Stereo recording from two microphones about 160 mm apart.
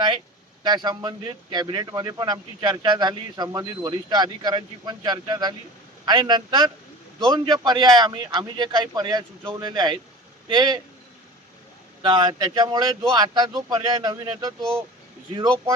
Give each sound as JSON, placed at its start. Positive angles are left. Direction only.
{"t": 0.6, "sound": "a man's voice", "side_deg": -25}
{"t": 12.0, "sound": "a man's voice", "side_deg": -25}